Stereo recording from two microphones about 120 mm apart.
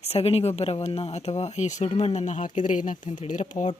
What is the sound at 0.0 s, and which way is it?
Speech, 55° left (ahead or behind).